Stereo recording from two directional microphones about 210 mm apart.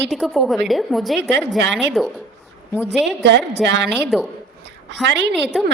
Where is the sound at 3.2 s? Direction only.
55° right (ahead or behind).